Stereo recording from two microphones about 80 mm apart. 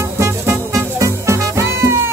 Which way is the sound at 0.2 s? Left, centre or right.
Right.